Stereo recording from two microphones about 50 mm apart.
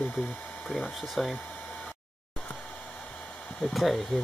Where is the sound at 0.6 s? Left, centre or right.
Centre.